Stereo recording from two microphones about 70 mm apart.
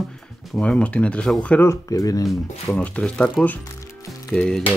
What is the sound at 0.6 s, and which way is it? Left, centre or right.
Speech, centre.